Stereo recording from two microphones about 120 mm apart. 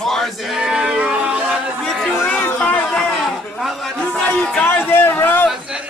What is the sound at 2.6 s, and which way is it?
A man's voice, 5° left (ahead or behind).